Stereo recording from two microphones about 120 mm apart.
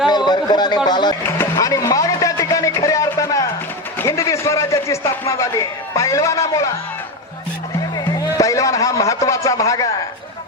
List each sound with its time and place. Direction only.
0.3 s speech: 35° left (ahead or behind)
1.2 s a man's voice: 25° left (ahead or behind)
7.9 s a man's voice: 30° left (ahead or behind)